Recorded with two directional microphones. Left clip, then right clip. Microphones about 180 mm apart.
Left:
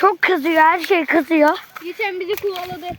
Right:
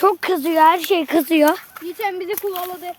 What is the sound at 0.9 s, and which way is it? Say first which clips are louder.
Speech: left 1 dB; 20° right (ahead or behind).